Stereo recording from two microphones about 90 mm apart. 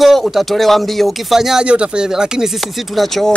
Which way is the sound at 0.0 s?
Centre (ahead or behind).